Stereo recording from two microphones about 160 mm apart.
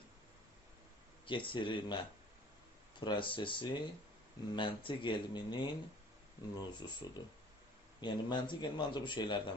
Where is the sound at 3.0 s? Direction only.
30° left (ahead or behind).